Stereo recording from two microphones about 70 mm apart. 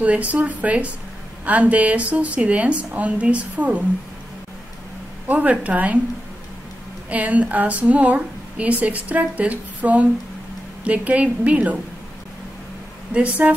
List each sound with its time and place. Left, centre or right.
0.0 s a woman's voice: centre
5.3 s a woman's voice: right
7.1 s a woman's voice: right
13.1 s a woman's voice: centre